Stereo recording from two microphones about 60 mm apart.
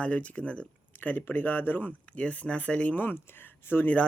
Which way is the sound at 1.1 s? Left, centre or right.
Left.